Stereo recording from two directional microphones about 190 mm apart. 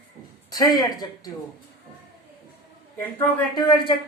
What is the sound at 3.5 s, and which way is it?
Speech, 25° left (ahead or behind).